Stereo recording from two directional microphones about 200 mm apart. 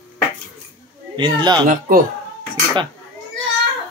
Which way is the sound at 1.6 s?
40° right (ahead or behind).